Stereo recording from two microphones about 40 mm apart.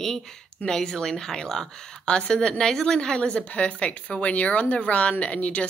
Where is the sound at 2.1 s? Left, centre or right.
Left.